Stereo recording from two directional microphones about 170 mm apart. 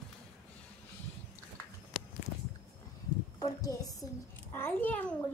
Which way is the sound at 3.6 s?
20° left (ahead or behind).